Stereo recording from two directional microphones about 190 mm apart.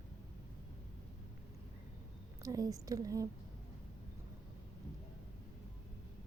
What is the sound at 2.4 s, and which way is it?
Speech, 20° right (ahead or behind).